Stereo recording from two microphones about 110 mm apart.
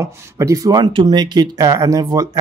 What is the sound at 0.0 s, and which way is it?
Speech, 30° right (ahead or behind).